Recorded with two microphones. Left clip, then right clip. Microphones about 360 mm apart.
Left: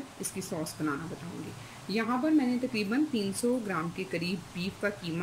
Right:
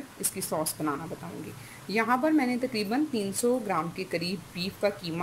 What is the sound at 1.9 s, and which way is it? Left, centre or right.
Speech, centre.